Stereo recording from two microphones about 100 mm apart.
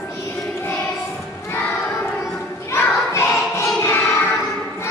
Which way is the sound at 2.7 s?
25° left (ahead or behind).